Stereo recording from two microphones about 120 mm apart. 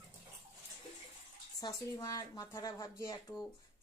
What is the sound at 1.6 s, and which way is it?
A woman's voice, 30° left (ahead or behind).